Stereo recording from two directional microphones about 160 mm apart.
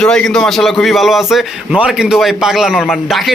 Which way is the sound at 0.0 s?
5° left (ahead or behind).